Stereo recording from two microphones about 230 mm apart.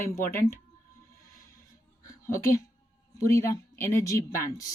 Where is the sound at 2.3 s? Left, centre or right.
Centre.